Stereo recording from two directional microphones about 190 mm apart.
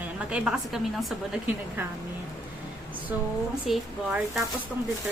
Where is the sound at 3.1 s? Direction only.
10° right (ahead or behind).